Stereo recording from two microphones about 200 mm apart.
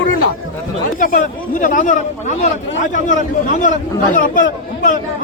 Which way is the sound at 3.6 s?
40° left (ahead or behind).